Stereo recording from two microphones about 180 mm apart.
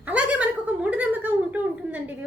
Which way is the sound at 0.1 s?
10° right (ahead or behind).